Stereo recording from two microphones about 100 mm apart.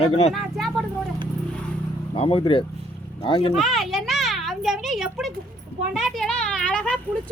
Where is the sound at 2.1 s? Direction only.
65° left (ahead or behind).